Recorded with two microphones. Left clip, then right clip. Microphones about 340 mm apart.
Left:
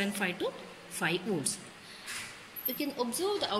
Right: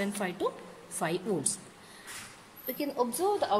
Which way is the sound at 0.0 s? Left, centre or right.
Right.